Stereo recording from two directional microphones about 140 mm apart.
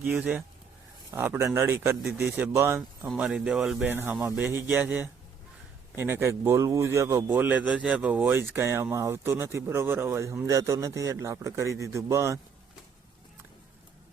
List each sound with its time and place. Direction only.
0.1 s speech: 10° right (ahead or behind)
3.2 s speech: 5° right (ahead or behind)
3.9 s a man's voice: 15° right (ahead or behind)